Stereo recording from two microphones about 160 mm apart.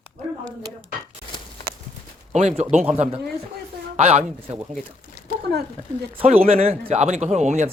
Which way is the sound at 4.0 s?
40° right (ahead or behind).